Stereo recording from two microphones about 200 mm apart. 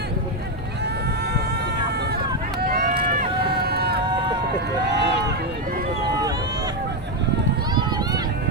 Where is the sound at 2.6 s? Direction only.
50° right (ahead or behind).